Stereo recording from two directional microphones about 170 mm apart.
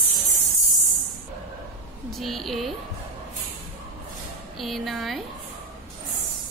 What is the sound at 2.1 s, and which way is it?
Speech, centre (ahead or behind).